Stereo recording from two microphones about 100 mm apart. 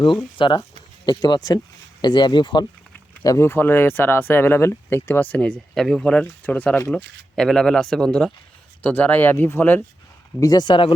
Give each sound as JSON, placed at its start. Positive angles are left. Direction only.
{"t": 0.3, "sound": "speech", "side_deg": 55}
{"t": 3.2, "sound": "speech", "side_deg": 30}
{"t": 10.4, "sound": "speech", "side_deg": 45}